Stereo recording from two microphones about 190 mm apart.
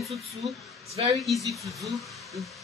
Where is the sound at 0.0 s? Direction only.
Centre (ahead or behind).